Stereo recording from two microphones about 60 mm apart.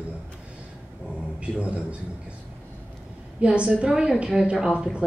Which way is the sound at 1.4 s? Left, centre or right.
Centre.